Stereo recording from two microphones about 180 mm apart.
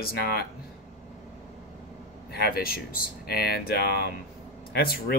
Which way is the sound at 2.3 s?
60° left (ahead or behind).